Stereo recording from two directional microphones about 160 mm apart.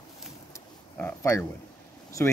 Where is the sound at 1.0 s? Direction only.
10° left (ahead or behind).